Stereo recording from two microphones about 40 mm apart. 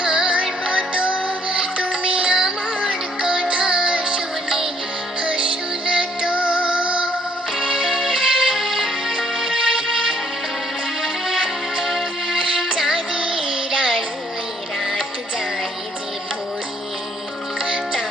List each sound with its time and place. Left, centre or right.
0.0 s music: right
5.2 s music: right